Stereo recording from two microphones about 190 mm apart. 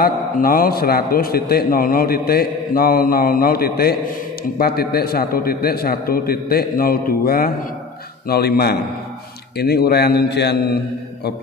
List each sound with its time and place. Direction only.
0.0 s a man's voice: 50° left (ahead or behind)